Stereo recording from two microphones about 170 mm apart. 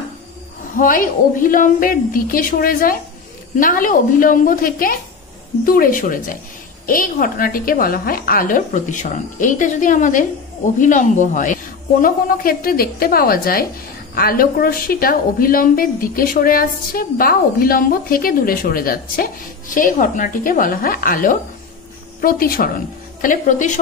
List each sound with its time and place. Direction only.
0.7 s a woman's voice: 55° left (ahead or behind)